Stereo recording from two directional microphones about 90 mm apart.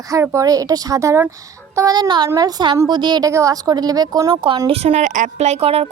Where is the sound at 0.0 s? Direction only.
40° right (ahead or behind); by 3.2 s 55° right (ahead or behind).